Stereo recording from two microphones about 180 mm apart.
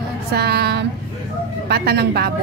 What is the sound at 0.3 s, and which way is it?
A woman's voice, 60° right (ahead or behind).